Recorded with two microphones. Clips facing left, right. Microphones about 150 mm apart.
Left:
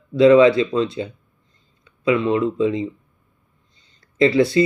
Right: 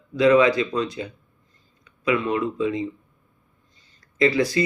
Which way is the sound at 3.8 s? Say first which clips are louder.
Left 4 dB; 25° left (ahead or behind).